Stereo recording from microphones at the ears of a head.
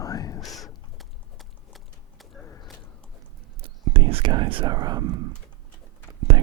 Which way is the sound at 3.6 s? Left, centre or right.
Right.